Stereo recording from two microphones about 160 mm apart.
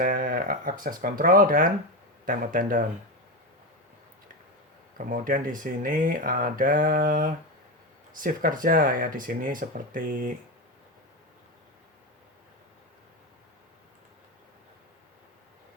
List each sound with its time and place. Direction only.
0.0 s speech: 60° right (ahead or behind)
4.9 s speech: 60° right (ahead or behind)